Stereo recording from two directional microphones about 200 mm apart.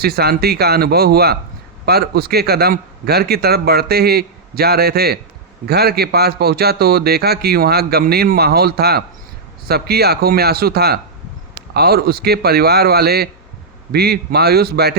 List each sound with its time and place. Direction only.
0.0 s a man's voice: 50° right (ahead or behind)